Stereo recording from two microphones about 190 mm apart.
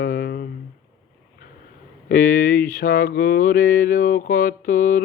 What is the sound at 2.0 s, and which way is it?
Mantra, 50° left (ahead or behind).